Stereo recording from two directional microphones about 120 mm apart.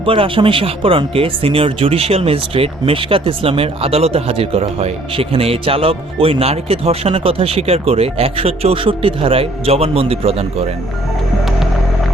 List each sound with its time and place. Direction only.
0.0 s speech: 50° right (ahead or behind)